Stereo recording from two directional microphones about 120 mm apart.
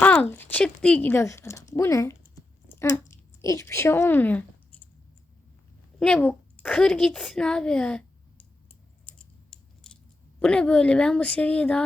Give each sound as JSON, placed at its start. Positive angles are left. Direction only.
{"t": 0.0, "sound": "a woman's voice", "side_deg": 15}
{"t": 2.7, "sound": "chewing", "side_deg": 25}
{"t": 3.4, "sound": "a woman's voice", "side_deg": 25}
{"t": 6.0, "sound": "a sound", "side_deg": 5}
{"t": 6.7, "sound": "speech", "side_deg": 5}
{"t": 9.0, "sound": "a sound", "side_deg": 5}
{"t": 10.4, "sound": "a woman's voice", "side_deg": 10}